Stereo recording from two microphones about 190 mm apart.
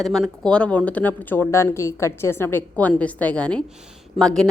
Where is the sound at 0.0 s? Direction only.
Centre (ahead or behind).